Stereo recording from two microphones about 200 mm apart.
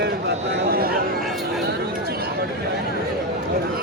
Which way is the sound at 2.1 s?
50° right (ahead or behind).